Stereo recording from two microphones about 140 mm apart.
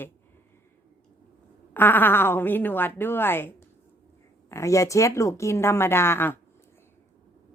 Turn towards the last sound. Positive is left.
turn(degrees=15)  # may be behind; listen again after turning